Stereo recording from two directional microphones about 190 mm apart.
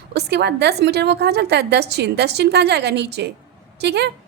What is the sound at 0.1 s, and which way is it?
A woman's voice, 60° right (ahead or behind).